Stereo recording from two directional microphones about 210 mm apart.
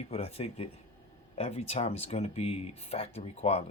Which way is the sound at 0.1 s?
30° left (ahead or behind).